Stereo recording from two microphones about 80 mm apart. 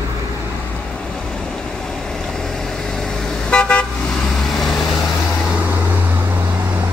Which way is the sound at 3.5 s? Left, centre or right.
Centre.